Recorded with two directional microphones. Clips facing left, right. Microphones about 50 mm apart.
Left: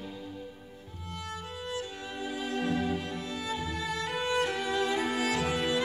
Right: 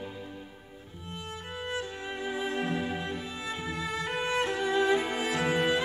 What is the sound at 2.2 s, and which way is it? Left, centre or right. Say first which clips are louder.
Music: even; right.